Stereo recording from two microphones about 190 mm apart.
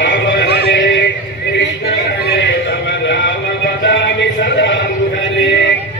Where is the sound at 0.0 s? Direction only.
65° left (ahead or behind).